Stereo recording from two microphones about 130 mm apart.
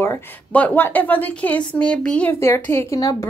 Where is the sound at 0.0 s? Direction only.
15° left (ahead or behind).